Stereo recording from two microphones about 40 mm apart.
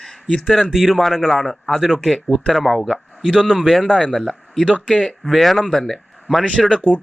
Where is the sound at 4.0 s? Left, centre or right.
Centre.